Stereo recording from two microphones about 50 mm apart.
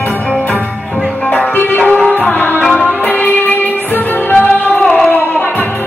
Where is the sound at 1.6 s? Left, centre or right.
Left.